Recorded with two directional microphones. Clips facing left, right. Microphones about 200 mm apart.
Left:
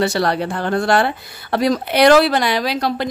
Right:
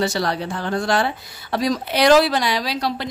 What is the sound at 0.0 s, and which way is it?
Speech, 60° left (ahead or behind).